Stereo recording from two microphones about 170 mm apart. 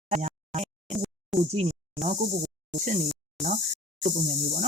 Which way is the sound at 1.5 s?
40° right (ahead or behind).